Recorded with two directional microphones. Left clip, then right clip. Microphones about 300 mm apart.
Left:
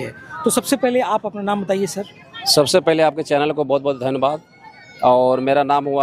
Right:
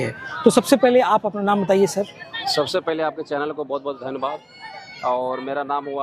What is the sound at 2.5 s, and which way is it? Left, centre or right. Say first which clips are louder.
Speech: left 8 dB; left.